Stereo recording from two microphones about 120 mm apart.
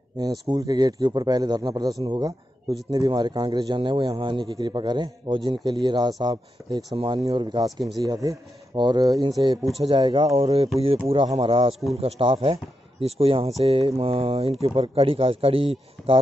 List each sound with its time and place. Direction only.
0.2 s a man's voice: 30° right (ahead or behind)
7.7 s speech: centre (ahead or behind)
8.0 s a man's voice: 30° right (ahead or behind); by 11.7 s 45° right (ahead or behind)
11.9 s speech: 55° right (ahead or behind)